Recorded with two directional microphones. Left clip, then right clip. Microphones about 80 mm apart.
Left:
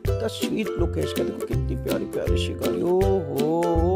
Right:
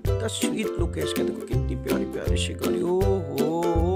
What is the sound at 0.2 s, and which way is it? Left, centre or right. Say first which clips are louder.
Speech: even; left.